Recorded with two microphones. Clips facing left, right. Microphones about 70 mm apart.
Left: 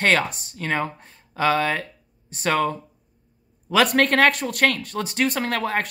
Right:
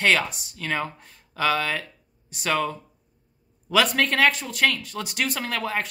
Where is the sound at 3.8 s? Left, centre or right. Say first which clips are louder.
Left 6 dB; left.